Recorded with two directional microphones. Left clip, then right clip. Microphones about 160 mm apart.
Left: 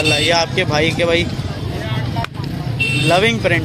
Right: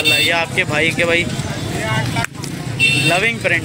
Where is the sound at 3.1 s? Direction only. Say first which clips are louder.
Left 1 dB; 25° left (ahead or behind).